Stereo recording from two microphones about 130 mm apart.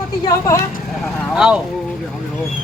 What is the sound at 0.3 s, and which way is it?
Speech, 25° left (ahead or behind).